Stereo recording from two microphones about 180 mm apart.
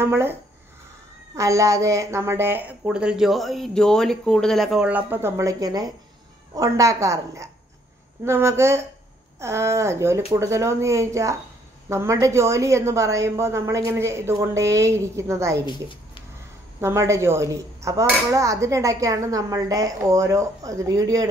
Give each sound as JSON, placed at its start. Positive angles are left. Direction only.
{"t": 0.0, "sound": "speech", "side_deg": -15}
{"t": 15.6, "sound": "speech", "side_deg": 25}
{"t": 16.8, "sound": "speech", "side_deg": -15}